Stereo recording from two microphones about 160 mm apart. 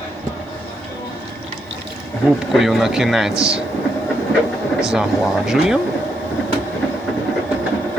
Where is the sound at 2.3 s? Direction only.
Centre (ahead or behind).